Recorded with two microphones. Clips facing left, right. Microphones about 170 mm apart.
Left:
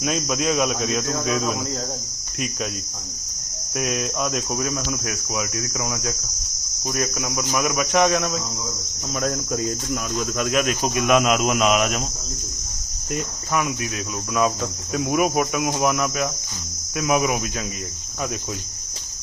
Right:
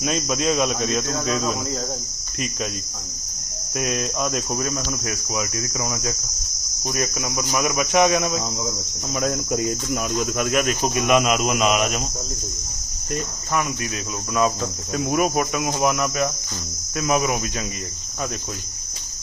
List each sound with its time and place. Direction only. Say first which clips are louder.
0.0 s cricket: even; centre (ahead or behind)
3.8 s cricket: even; centre (ahead or behind)
9.5 s cricket: right 2 dB; 15° right (ahead or behind)
10.3 s cricket: left 2 dB; 5° right (ahead or behind)
14.9 s cricket: left 1 dB; 5° left (ahead or behind)